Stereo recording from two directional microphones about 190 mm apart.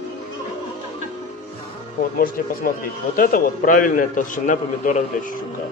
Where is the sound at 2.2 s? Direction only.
50° left (ahead or behind).